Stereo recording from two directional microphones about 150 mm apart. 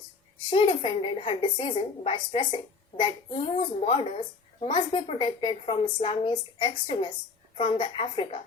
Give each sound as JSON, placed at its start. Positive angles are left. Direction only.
{"t": 0.5, "sound": "a child's voice", "side_deg": 35}